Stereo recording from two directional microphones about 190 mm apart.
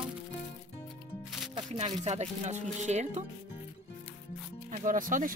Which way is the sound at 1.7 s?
35° right (ahead or behind).